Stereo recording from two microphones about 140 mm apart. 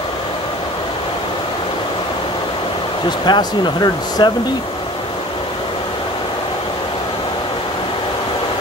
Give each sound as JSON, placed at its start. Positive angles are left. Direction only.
{"t": 3.3, "sound": "speech", "side_deg": 30}